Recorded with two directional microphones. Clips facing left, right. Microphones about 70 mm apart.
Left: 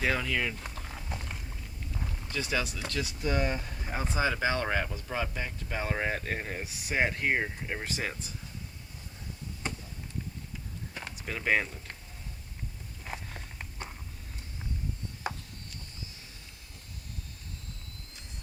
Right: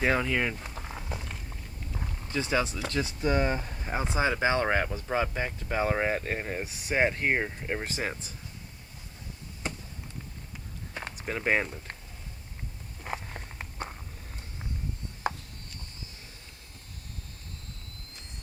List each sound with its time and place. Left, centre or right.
0.0 s speech: right
0.8 s a sound: centre
2.3 s speech: right
5.3 s speech: right
10.9 s speech: right
13.3 s walk: right